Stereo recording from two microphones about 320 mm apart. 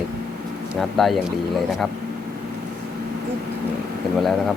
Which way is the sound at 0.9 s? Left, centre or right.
Centre.